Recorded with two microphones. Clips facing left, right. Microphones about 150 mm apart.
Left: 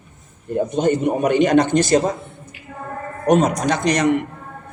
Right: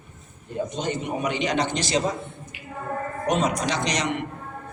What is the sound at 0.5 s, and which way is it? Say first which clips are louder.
A man's voice: left 9 dB; 55° left (ahead or behind).